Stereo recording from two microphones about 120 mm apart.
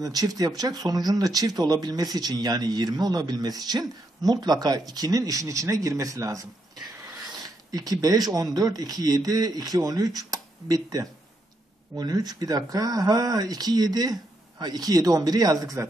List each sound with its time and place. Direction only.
0.0 s speech: 30° right (ahead or behind)